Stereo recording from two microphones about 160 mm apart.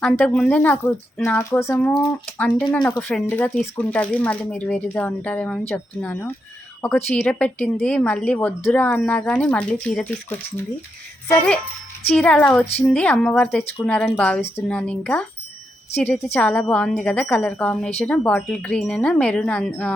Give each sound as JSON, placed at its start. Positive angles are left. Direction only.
{"t": 0.0, "sound": "a woman's voice", "side_deg": 10}
{"t": 1.8, "sound": "a woman's voice", "side_deg": 5}